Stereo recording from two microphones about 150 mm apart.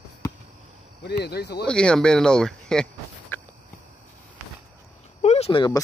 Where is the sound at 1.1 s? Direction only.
90° left.